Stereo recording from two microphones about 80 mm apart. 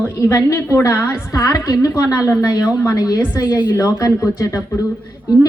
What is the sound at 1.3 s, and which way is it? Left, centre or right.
A woman's voice, left.